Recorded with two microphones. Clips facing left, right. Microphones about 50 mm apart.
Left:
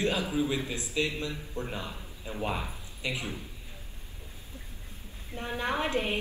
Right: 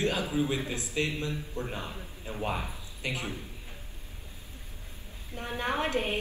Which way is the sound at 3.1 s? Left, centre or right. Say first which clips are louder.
Even; right.